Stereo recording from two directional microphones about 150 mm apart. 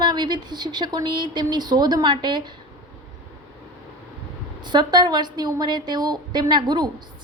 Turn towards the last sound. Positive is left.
turn(degrees=-30)  # may be behind; listen again after turning